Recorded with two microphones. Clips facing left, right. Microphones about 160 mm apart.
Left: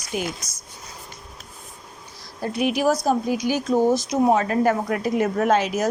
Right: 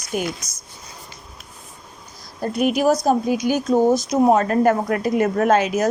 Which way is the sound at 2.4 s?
50° right (ahead or behind).